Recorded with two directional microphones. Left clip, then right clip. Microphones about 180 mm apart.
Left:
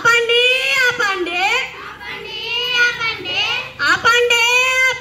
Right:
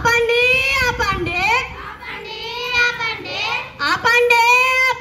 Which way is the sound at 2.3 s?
25° right (ahead or behind).